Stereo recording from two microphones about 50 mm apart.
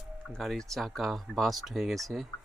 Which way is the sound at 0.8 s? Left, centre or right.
Centre.